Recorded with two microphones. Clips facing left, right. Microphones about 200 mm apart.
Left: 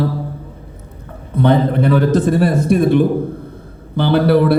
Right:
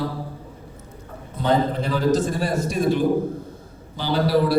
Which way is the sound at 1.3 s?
60° left (ahead or behind).